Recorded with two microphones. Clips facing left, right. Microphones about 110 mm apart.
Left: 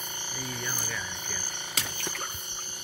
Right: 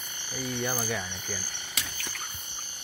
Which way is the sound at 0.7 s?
50° right (ahead or behind).